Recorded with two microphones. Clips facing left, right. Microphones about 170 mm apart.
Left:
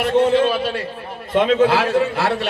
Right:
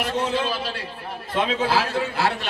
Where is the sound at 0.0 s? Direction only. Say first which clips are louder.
Left 9 dB; 60° left (ahead or behind).